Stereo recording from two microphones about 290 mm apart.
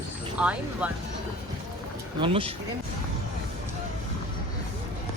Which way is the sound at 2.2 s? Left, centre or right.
Centre.